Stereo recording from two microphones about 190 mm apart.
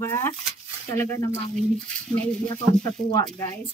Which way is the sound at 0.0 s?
10° left (ahead or behind).